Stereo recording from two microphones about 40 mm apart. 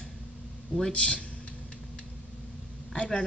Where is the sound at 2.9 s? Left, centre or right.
Left.